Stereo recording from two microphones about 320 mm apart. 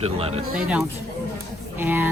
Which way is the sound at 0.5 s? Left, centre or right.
Centre.